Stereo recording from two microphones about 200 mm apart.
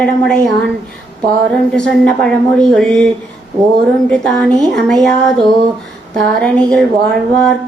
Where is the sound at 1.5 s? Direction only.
5° left (ahead or behind).